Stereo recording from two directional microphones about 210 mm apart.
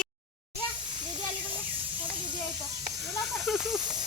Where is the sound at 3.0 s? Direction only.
Centre (ahead or behind).